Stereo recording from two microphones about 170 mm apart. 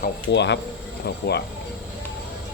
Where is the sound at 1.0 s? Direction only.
75° left (ahead or behind).